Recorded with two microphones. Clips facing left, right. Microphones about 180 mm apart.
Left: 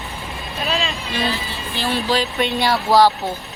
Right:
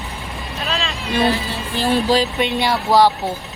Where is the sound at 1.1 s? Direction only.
60° right (ahead or behind).